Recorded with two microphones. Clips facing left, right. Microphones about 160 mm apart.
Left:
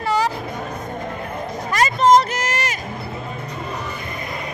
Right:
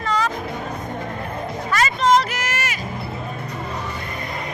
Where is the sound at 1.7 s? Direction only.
40° left (ahead or behind).